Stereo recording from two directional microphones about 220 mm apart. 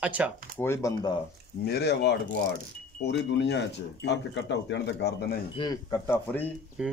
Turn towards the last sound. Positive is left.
turn(degrees=-5)  # may be behind; listen again after turning